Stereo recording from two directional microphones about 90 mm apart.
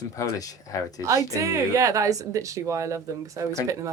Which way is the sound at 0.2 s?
40° left (ahead or behind).